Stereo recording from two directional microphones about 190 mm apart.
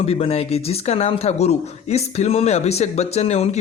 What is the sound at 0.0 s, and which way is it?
Speech, 30° left (ahead or behind).